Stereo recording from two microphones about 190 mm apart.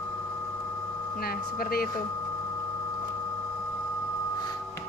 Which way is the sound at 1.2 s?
55° left (ahead or behind).